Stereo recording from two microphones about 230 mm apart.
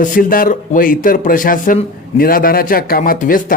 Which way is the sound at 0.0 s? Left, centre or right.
Left.